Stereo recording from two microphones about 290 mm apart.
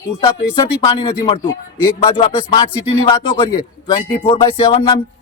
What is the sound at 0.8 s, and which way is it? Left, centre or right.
Speech, centre.